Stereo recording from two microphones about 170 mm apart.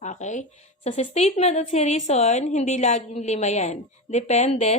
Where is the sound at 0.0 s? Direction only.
45° left (ahead or behind).